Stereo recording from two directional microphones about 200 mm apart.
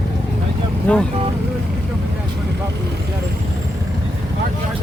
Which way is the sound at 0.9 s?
5° left (ahead or behind).